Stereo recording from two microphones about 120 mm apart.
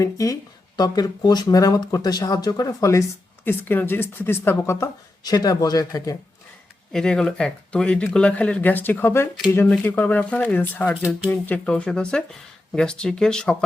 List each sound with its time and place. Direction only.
0.0 s speech: 25° left (ahead or behind)
3.4 s speech: 15° left (ahead or behind)
6.9 s speech: 5° left (ahead or behind)